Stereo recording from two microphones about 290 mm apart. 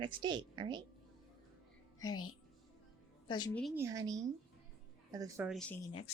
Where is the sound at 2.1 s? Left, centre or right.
Left.